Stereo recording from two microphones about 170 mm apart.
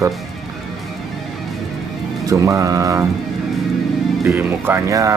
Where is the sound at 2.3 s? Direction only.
20° right (ahead or behind).